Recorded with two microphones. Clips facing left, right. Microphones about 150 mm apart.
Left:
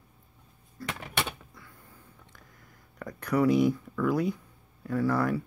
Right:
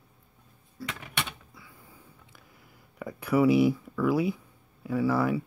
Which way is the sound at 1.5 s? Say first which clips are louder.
Right 1 dB; 5° right (ahead or behind).